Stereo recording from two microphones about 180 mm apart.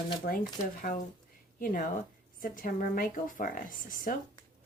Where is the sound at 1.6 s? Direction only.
50° left (ahead or behind).